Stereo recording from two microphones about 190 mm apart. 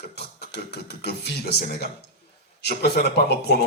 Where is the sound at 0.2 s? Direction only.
60° left (ahead or behind).